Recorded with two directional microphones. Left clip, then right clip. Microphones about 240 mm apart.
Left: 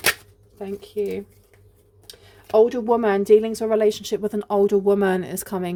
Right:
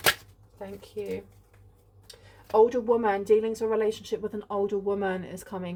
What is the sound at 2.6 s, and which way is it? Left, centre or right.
Speech, left.